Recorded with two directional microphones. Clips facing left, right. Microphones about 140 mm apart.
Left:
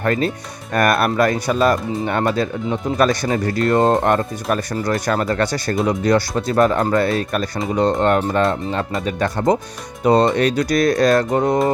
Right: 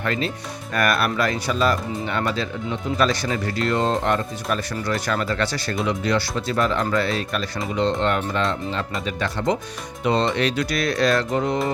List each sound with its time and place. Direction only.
0.0 s speech: 45° left (ahead or behind)